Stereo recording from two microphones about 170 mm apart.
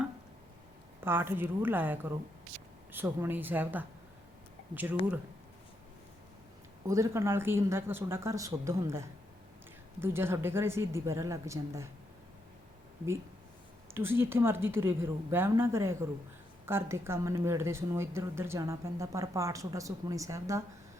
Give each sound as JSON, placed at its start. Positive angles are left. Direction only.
{"t": 1.0, "sound": "speech", "side_deg": -15}
{"t": 6.8, "sound": "speech", "side_deg": -20}
{"t": 13.9, "sound": "speech", "side_deg": -15}